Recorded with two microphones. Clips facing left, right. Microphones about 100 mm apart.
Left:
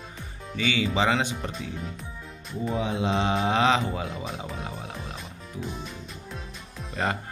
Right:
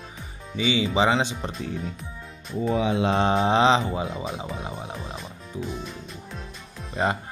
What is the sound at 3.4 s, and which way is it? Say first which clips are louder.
Speech: right 3 dB; 25° right (ahead or behind).